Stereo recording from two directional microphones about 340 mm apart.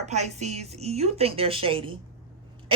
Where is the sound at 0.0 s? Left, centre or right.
Centre.